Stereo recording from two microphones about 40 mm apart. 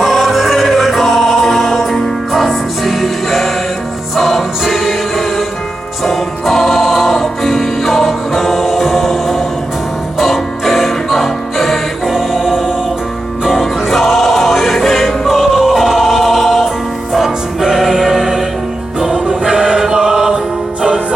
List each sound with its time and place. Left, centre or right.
0.0 s choir: centre
2.3 s music: centre
12.1 s choir: centre
13.4 s music: centre